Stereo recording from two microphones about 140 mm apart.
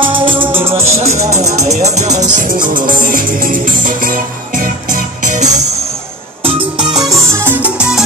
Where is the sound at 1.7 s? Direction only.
55° right (ahead or behind).